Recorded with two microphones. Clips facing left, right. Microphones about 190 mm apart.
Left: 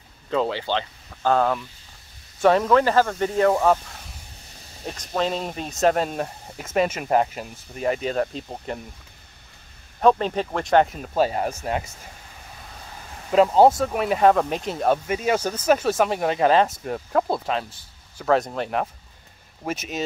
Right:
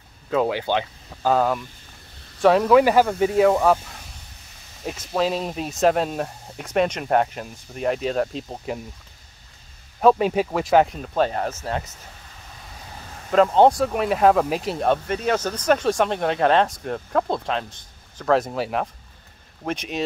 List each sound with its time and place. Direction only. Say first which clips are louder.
0.3 s speech: right 2 dB; 10° right (ahead or behind)
2.8 s speech: right 3 dB; 10° right (ahead or behind)
4.8 s speech: right 2 dB; 5° right (ahead or behind)
9.9 s speech: right 2 dB; 5° right (ahead or behind); by 12.0 s 10° left (ahead or behind)
13.3 s speech: even; 5° left (ahead or behind)